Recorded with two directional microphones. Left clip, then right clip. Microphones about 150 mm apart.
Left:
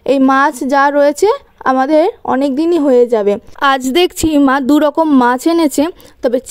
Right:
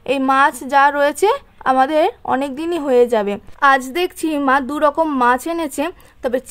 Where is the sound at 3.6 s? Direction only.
55° left (ahead or behind); by 6.4 s 35° left (ahead or behind).